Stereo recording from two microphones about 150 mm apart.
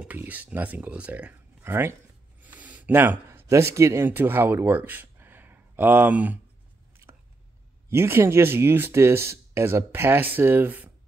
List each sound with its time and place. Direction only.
0.0 s speech: 10° right (ahead or behind)
7.9 s speech: 15° right (ahead or behind)